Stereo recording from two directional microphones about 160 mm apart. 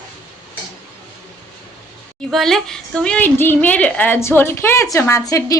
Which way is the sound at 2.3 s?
Centre (ahead or behind).